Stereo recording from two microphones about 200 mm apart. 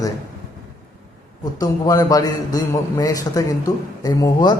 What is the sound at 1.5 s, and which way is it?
A man's voice, 20° left (ahead or behind).